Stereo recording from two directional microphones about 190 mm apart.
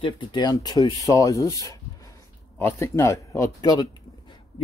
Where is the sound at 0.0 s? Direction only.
25° left (ahead or behind).